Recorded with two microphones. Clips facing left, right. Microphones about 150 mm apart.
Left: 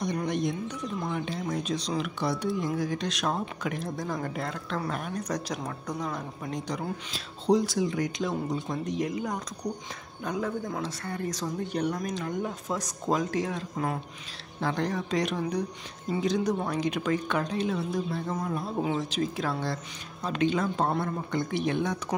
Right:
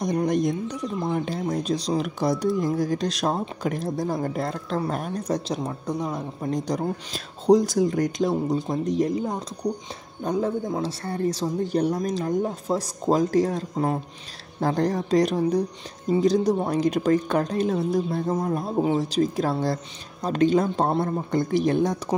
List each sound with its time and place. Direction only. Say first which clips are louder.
0.0 s a sound: right 6 dB; 40° right (ahead or behind)
1.1 s speech: right 5 dB; 40° right (ahead or behind); by 6.2 s 25° right (ahead or behind)
6.4 s speech: right 9 dB; 40° right (ahead or behind)